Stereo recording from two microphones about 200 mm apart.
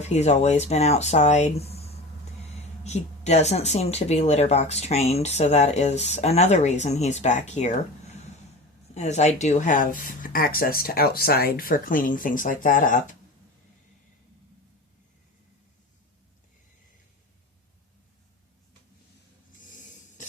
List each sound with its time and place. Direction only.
0.0 s speech: 35° left (ahead or behind)